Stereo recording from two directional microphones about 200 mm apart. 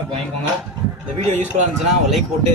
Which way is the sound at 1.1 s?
35° right (ahead or behind).